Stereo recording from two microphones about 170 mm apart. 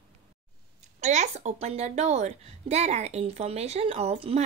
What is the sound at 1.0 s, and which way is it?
A woman's voice, 45° right (ahead or behind).